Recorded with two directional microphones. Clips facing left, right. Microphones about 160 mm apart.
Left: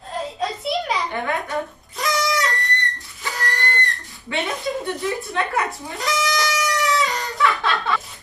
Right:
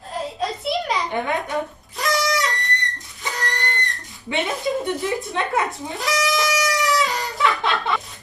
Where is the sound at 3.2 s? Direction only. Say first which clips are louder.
Left 1 dB; 20° right (ahead or behind).